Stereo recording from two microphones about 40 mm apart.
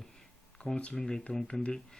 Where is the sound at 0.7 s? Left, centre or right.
Left.